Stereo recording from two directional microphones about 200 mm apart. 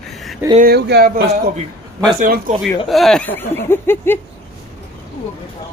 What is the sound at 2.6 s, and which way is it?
Speech, centre (ahead or behind).